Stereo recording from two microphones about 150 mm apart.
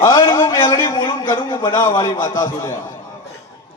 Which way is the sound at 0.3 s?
15° left (ahead or behind).